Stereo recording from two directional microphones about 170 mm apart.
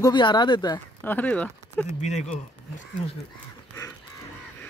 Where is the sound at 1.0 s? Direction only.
10° left (ahead or behind).